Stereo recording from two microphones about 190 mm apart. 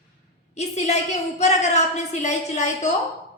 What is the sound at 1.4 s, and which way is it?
A woman's voice, 35° left (ahead or behind).